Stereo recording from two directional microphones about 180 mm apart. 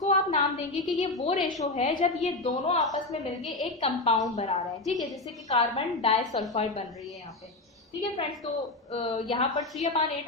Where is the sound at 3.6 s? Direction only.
35° left (ahead or behind).